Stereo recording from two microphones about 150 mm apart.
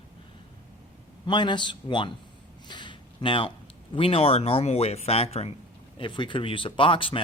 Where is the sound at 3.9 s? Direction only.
40° left (ahead or behind).